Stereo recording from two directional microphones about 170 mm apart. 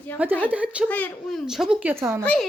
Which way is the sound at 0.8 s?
10° left (ahead or behind).